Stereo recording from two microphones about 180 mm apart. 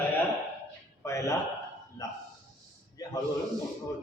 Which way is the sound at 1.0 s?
15° left (ahead or behind).